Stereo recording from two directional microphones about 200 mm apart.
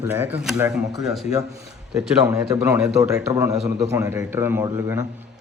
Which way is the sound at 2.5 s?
15° right (ahead or behind).